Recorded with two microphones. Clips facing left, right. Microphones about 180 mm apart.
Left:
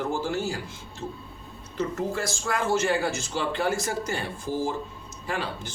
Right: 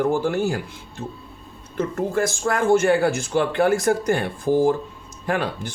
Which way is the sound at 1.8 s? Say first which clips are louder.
Right 6 dB; 50° right (ahead or behind).